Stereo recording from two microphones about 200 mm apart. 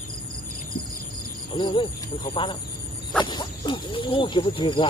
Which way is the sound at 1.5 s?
25° left (ahead or behind).